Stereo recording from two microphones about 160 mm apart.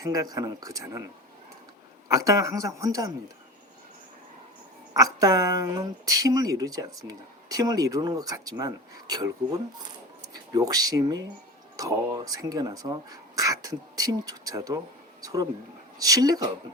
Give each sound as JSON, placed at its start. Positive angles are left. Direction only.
{"t": 0.0, "sound": "speech", "side_deg": -20}
{"t": 2.0, "sound": "speech", "side_deg": -20}
{"t": 4.9, "sound": "speech", "side_deg": -20}